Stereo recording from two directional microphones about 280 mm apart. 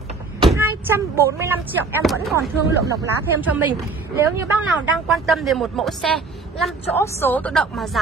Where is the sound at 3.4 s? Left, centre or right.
Centre.